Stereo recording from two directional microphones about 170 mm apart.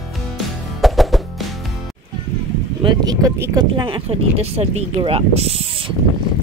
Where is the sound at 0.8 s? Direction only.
Centre (ahead or behind).